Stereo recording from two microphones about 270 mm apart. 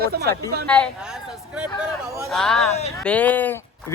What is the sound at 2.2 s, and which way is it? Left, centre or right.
Speech, centre.